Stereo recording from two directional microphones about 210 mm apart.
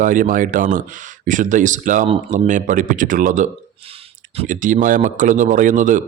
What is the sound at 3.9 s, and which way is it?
Speech, 30° right (ahead or behind).